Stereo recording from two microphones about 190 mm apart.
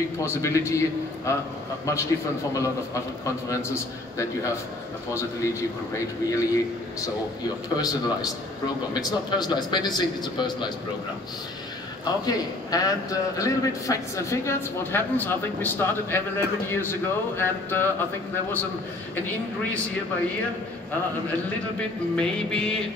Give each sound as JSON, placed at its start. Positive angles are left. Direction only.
{"t": 0.2, "sound": "a man's voice", "side_deg": 15}
{"t": 2.5, "sound": "a man's voice", "side_deg": 15}
{"t": 12.0, "sound": "a man's voice", "side_deg": 20}
{"t": 22.1, "sound": "music", "side_deg": 5}